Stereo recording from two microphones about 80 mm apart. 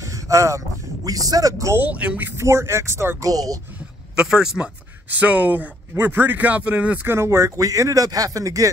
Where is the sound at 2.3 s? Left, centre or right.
Right.